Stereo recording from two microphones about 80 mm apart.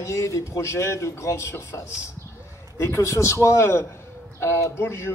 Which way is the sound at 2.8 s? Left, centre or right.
Left.